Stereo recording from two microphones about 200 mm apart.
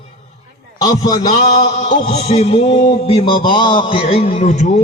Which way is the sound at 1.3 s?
35° left (ahead or behind).